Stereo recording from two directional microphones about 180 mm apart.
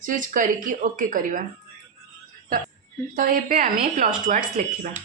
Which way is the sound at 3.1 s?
50° right (ahead or behind).